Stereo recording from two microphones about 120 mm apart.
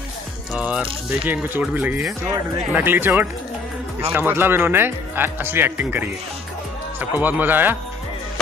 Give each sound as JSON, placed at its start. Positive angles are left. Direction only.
{"t": 0.6, "sound": "speech", "side_deg": -10}